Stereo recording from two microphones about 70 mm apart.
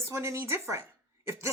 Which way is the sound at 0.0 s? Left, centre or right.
Right.